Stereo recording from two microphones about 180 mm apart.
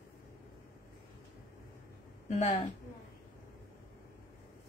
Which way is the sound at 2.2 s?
40° left (ahead or behind).